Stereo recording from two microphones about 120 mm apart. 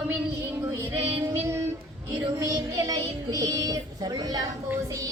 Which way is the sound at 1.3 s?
20° right (ahead or behind).